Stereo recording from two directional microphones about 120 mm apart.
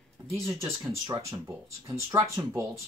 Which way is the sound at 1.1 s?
25° right (ahead or behind).